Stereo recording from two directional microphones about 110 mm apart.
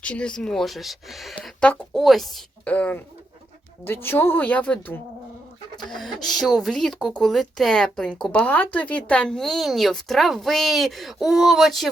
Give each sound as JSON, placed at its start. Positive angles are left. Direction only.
{"t": 0.0, "sound": "speech", "side_deg": 10}
{"t": 1.4, "sound": "speech", "side_deg": 10}
{"t": 2.6, "sound": "speech", "side_deg": 15}
{"t": 5.9, "sound": "speech", "side_deg": 5}